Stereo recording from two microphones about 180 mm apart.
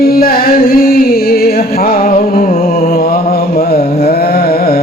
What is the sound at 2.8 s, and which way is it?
Mantra, 55° left (ahead or behind).